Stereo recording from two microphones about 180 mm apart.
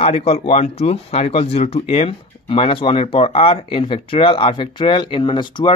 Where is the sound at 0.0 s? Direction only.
35° left (ahead or behind).